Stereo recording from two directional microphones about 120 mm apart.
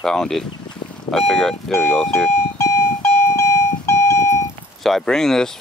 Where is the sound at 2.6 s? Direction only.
25° left (ahead or behind).